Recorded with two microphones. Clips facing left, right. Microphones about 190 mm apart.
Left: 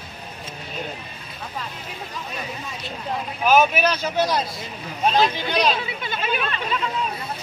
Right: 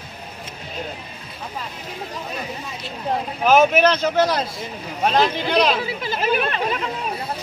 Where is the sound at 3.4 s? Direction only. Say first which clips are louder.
Right 3 dB; 75° right (ahead or behind).